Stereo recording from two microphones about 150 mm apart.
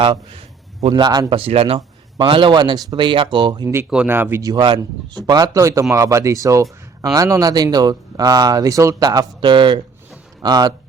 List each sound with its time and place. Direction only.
0.0 s a man's voice: 35° right (ahead or behind)
1.4 s a man's voice: 40° right (ahead or behind)
3.8 s speech: 10° right (ahead or behind)
4.5 s speech: 30° right (ahead or behind)